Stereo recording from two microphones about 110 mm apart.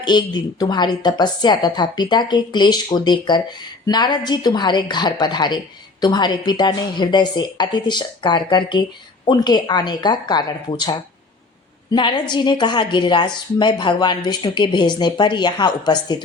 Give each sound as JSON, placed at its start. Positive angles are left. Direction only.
{"t": 0.0, "sound": "a woman's voice", "side_deg": 40}